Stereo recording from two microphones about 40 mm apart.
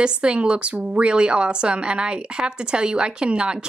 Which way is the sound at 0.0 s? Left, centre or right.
Right.